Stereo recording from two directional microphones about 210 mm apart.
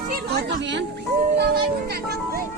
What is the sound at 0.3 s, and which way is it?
A child's voice, 50° right (ahead or behind).